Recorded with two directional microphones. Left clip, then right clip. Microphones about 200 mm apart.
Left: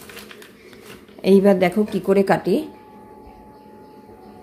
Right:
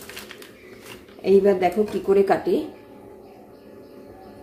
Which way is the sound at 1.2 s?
50° left (ahead or behind).